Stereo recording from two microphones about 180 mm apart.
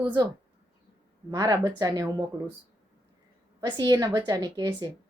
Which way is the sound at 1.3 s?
20° right (ahead or behind).